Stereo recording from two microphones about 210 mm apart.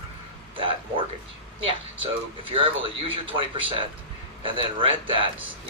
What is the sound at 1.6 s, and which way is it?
Speech, 25° right (ahead or behind).